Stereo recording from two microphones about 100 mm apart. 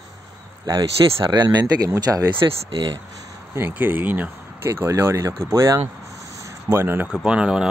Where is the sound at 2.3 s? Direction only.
55° right (ahead or behind).